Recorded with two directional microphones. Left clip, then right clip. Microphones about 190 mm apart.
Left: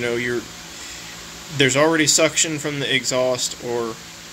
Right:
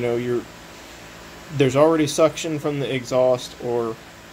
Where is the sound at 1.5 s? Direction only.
5° right (ahead or behind).